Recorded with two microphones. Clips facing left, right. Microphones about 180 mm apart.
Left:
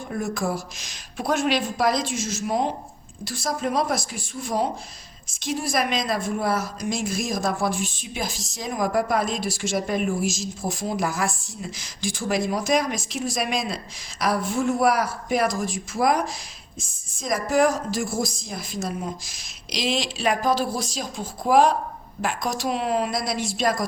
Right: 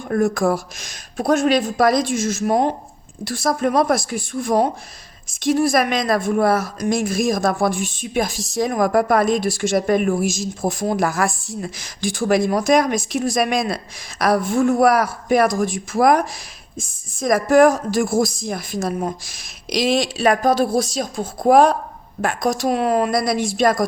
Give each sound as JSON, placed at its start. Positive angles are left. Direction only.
{"t": 0.1, "sound": "speech", "side_deg": -55}